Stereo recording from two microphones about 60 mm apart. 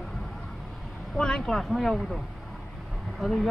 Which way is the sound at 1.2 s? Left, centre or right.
Centre.